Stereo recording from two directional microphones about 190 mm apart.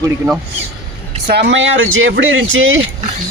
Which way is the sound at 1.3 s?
65° right (ahead or behind).